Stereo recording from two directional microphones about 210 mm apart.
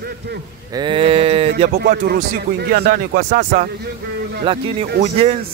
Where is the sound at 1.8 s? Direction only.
50° right (ahead or behind).